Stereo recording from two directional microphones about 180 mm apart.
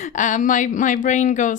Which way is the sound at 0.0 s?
45° left (ahead or behind).